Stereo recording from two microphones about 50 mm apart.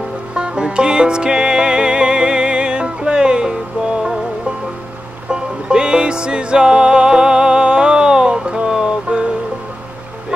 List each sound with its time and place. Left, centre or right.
0.3 s music: centre
5.3 s music: centre